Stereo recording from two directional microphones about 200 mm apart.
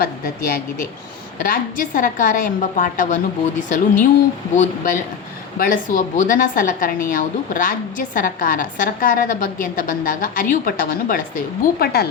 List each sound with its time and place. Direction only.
0.0 s a woman's voice: 45° left (ahead or behind)